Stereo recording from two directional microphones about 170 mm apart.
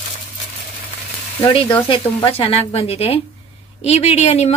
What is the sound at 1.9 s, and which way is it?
A woman's voice, 30° left (ahead or behind).